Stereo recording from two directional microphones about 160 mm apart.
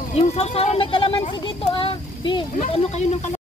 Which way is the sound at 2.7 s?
40° left (ahead or behind).